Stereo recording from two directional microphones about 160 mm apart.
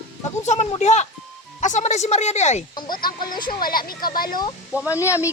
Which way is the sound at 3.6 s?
65° left (ahead or behind).